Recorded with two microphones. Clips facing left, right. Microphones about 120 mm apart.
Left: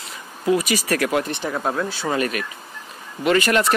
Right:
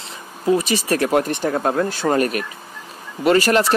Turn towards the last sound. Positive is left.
turn(degrees=-35)  # may be behind; listen again after turning